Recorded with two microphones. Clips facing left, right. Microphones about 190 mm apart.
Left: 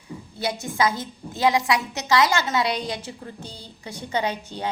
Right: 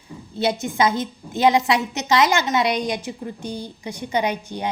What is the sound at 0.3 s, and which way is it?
A woman's voice, 20° right (ahead or behind).